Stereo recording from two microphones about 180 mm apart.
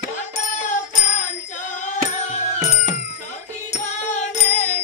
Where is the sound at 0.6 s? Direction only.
45° left (ahead or behind).